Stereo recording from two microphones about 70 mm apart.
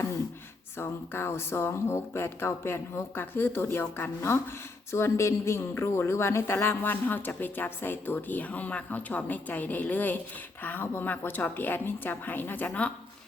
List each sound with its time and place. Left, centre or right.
0.8 s a woman's voice: left